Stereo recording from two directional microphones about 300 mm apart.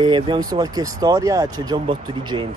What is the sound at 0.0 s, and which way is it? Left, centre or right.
Speech, centre.